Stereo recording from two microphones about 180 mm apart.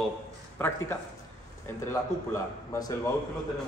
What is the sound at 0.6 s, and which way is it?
A man's voice, 10° left (ahead or behind).